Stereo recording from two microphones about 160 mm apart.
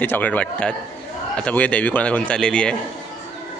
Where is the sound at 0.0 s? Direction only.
10° left (ahead or behind).